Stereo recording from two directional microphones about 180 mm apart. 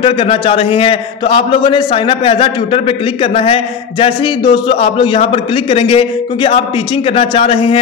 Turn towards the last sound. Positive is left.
turn(degrees=30)  # may be behind; listen again after turning